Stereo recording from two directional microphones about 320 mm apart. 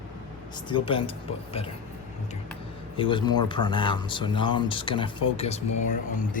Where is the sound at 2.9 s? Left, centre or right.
Centre.